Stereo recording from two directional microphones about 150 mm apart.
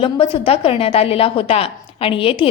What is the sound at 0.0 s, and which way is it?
A woman's voice, 40° left (ahead or behind).